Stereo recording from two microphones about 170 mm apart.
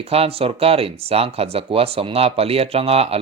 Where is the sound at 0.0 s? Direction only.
35° right (ahead or behind).